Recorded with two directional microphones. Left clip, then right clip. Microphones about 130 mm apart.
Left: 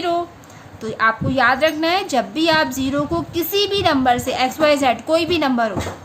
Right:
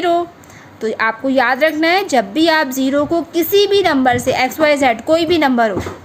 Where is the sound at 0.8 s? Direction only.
40° right (ahead or behind).